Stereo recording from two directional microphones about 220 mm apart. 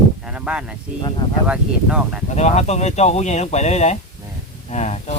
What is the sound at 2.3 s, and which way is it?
Speech, 30° left (ahead or behind).